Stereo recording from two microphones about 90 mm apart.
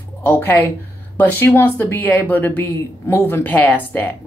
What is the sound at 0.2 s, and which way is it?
Speech, 25° left (ahead or behind).